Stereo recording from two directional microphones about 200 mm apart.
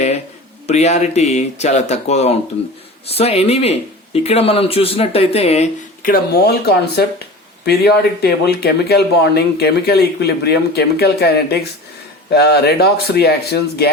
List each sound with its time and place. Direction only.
0.7 s speech: 35° left (ahead or behind); by 13.9 s 50° left (ahead or behind)